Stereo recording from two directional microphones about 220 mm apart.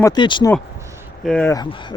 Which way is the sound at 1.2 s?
5° left (ahead or behind).